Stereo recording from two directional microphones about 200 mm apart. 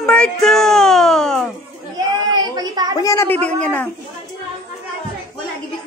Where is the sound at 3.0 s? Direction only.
15° left (ahead or behind).